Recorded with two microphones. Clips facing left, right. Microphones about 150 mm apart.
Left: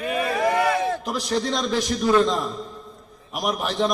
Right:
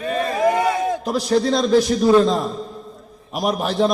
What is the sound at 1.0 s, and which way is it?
A man's voice, 30° right (ahead or behind).